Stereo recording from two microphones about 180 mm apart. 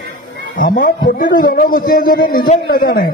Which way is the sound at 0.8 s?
55° left (ahead or behind).